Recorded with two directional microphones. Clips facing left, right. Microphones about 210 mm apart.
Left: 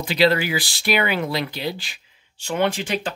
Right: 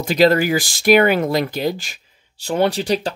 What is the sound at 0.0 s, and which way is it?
Speech, 45° right (ahead or behind).